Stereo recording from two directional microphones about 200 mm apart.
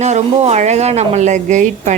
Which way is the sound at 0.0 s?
35° right (ahead or behind).